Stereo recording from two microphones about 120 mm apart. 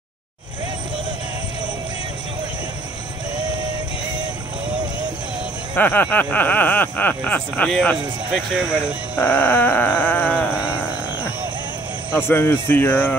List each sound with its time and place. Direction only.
5.8 s speech: 15° left (ahead or behind)
8.3 s speech: 10° right (ahead or behind)
9.2 s speech: 15° left (ahead or behind)
10.5 s a sound: 10° right (ahead or behind)
12.3 s speech: 15° left (ahead or behind)